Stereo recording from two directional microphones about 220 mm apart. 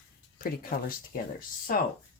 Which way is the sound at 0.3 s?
40° left (ahead or behind).